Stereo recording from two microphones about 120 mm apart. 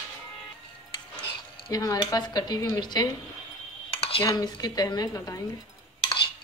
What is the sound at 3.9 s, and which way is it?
Cutlery, 55° left (ahead or behind).